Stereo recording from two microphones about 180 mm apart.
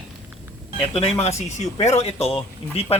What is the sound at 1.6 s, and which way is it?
Speech, 35° left (ahead or behind).